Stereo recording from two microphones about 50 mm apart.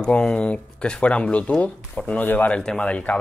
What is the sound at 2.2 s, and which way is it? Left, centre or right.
Speech, left.